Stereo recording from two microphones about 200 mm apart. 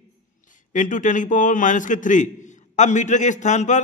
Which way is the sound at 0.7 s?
40° left (ahead or behind).